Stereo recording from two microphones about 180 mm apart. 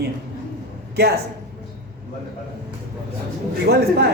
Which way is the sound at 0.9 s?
60° right (ahead or behind).